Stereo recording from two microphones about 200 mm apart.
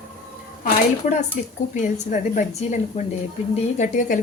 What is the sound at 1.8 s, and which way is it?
A woman's voice, 35° left (ahead or behind).